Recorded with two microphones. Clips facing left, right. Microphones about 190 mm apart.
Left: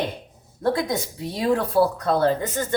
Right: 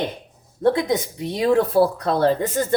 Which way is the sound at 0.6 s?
20° right (ahead or behind).